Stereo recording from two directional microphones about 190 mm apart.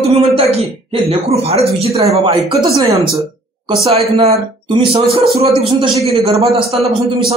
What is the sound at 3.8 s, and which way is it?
Speech, 30° right (ahead or behind).